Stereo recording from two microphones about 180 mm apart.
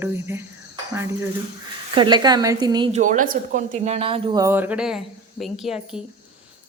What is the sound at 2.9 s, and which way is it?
Speech, 45° right (ahead or behind).